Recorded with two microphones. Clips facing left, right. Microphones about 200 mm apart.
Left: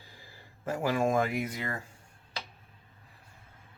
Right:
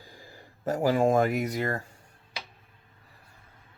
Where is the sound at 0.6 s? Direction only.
35° right (ahead or behind).